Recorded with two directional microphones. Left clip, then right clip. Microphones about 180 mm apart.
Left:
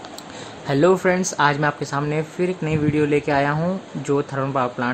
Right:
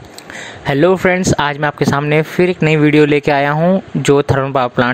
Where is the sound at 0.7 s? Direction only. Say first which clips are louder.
Right 5 dB; 30° right (ahead or behind).